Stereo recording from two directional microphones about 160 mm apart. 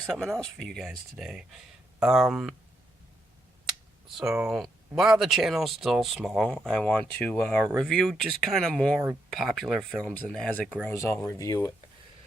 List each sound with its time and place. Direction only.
0.0 s speech: centre (ahead or behind)
3.7 s speech: centre (ahead or behind); by 11.7 s 20° left (ahead or behind)